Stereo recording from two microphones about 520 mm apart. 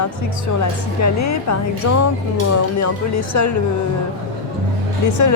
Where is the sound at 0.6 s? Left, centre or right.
Left.